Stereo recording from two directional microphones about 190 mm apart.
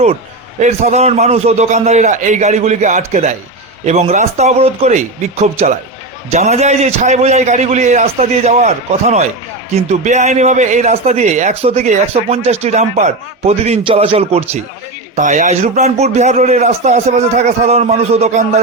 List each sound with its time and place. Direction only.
0.6 s a man's voice: 35° right (ahead or behind)